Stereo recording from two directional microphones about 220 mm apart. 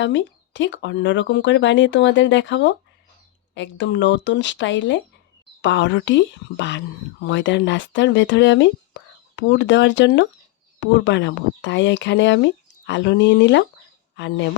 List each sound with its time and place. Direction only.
0.0 s speech: 55° left (ahead or behind)